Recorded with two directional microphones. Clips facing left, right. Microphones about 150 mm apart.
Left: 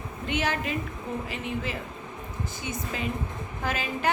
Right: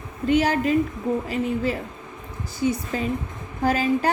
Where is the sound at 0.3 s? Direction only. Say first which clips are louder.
Right 9 dB; 40° right (ahead or behind).